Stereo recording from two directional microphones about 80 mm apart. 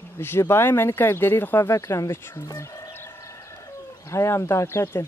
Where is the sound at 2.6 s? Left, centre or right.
Left.